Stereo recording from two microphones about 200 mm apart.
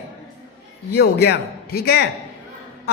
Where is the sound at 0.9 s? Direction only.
55° left (ahead or behind).